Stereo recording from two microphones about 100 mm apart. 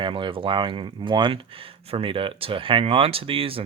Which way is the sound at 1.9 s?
65° right (ahead or behind).